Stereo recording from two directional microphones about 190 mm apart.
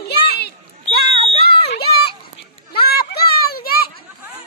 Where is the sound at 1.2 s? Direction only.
30° left (ahead or behind).